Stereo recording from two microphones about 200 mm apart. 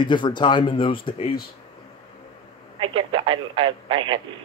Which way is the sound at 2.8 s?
25° right (ahead or behind).